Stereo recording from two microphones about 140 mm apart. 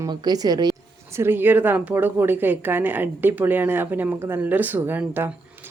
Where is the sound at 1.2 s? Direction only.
15° right (ahead or behind).